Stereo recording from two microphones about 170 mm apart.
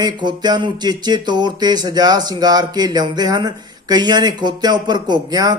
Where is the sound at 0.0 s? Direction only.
25° right (ahead or behind).